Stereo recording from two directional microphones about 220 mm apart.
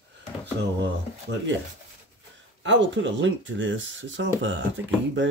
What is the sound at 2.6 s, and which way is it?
Speech, 55° right (ahead or behind).